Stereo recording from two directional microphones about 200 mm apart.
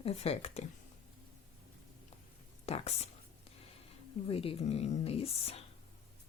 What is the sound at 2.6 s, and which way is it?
Speech, 30° left (ahead or behind).